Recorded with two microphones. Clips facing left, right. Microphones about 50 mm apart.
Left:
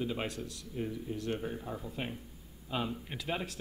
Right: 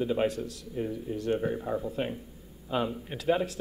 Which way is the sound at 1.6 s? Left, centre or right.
Right.